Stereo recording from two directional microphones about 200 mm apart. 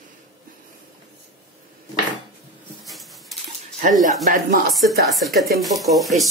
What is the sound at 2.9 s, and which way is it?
Dog, centre (ahead or behind).